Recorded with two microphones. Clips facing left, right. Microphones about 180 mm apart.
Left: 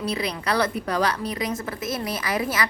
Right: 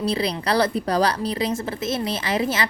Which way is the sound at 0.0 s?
30° right (ahead or behind).